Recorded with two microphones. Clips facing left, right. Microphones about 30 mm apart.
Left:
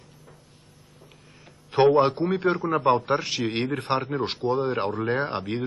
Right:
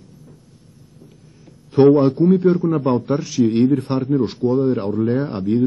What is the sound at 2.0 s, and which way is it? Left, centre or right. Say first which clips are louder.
Speech: right 6 dB; left.